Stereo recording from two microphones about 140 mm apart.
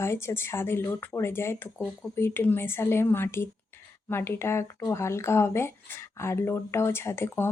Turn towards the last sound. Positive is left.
turn(degrees=15)  # may be behind; listen again after turning